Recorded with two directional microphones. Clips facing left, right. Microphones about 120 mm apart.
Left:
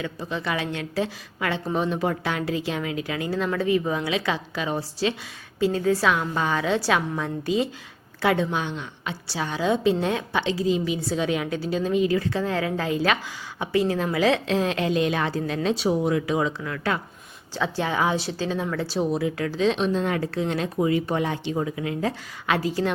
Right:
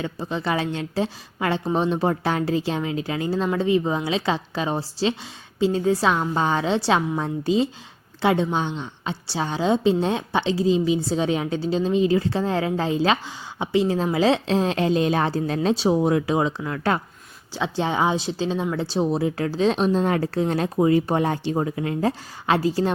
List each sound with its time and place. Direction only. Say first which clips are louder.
0.0 s a woman's voice: right 2 dB; 30° right (ahead or behind)
17.5 s a woman's voice: right 2 dB; 20° right (ahead or behind)